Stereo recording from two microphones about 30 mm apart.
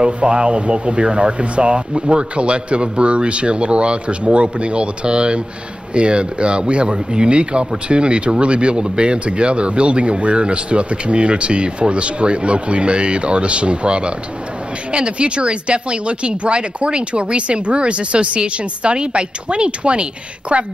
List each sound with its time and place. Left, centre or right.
0.0 s speech: right